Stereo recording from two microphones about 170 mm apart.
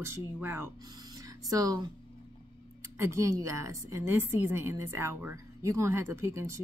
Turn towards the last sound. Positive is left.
turn(degrees=-15)  # may be behind; listen again after turning